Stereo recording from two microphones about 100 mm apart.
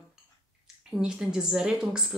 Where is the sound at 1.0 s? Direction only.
10° right (ahead or behind).